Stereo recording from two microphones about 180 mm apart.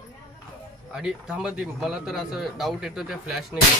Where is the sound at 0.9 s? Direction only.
5° right (ahead or behind).